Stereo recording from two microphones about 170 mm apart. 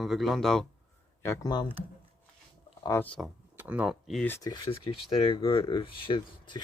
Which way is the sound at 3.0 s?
5° left (ahead or behind).